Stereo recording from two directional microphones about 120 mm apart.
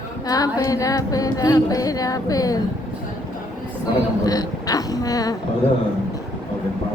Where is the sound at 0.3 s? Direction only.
30° left (ahead or behind).